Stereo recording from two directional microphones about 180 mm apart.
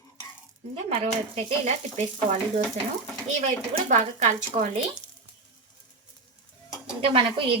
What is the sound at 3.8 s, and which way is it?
Speech, 45° right (ahead or behind).